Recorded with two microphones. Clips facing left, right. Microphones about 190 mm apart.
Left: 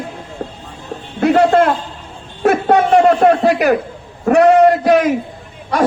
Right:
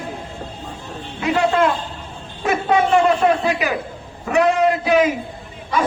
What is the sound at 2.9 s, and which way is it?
A man's voice, 60° left (ahead or behind).